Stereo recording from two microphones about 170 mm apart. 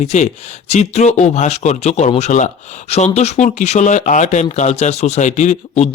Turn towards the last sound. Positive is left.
turn(degrees=45)  # may be behind; listen again after turning